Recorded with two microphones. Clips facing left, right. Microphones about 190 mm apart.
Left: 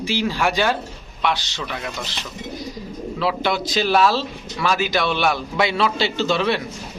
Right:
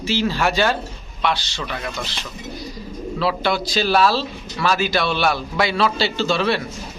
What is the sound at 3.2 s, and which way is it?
Speech, 15° left (ahead or behind).